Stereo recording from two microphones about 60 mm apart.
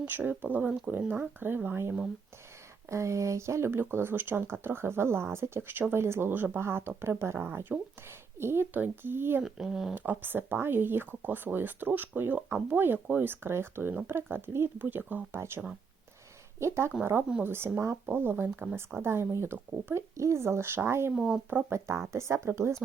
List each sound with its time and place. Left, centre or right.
0.0 s speech: right
2.9 s speech: right
8.7 s speech: right
9.4 s speech: centre
9.9 s speech: right
17.0 s speech: right
21.2 s speech: centre
21.7 s speech: right